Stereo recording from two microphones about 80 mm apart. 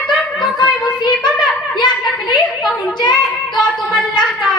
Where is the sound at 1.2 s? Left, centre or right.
Left.